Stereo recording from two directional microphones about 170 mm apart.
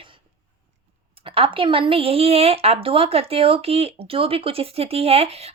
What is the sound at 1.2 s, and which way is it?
Speech, 35° right (ahead or behind).